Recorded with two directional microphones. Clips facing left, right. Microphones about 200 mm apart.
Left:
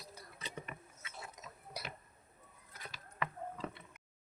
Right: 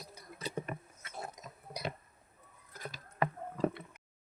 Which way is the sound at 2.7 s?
40° right (ahead or behind).